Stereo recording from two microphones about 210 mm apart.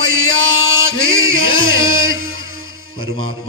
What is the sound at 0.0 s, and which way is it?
Music, 70° right (ahead or behind).